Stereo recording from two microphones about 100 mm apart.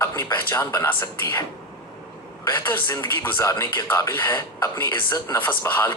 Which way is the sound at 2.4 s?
20° left (ahead or behind).